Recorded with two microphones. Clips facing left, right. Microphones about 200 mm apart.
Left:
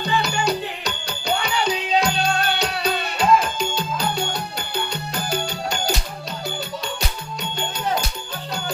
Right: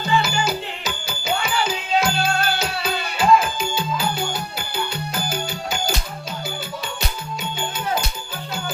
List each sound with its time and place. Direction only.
0.0 s music: centre (ahead or behind)